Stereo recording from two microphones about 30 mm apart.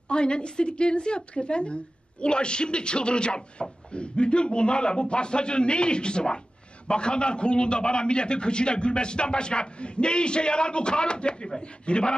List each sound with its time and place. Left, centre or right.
0.1 s a woman's voice: left